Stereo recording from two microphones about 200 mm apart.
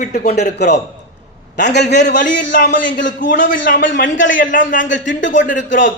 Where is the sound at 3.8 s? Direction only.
65° left (ahead or behind).